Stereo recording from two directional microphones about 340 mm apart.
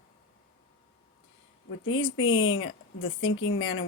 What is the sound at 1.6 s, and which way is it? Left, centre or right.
Speech, left.